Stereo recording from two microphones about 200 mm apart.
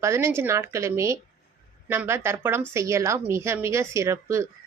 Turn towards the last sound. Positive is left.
turn(degrees=-15)  # may be behind; listen again after turning